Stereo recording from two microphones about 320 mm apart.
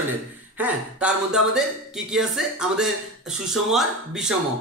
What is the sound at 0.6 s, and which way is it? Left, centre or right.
Speech, centre.